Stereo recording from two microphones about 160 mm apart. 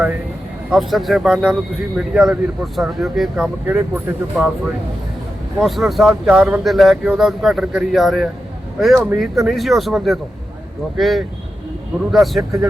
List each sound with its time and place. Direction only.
0.7 s speech: centre (ahead or behind)
5.5 s speech: centre (ahead or behind)